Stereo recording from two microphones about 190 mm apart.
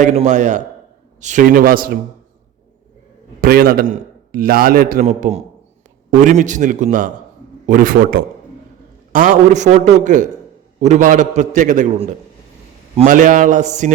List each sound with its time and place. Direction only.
0.0 s a man's voice: 35° right (ahead or behind)
3.4 s a man's voice: 50° right (ahead or behind)